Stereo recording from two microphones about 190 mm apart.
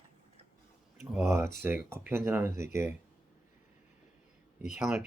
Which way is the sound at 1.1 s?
10° right (ahead or behind).